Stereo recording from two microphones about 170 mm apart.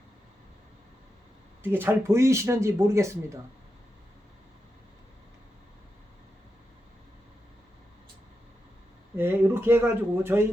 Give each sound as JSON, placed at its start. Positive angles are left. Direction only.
{"t": 1.6, "sound": "speech", "side_deg": -10}
{"t": 9.1, "sound": "speech", "side_deg": -10}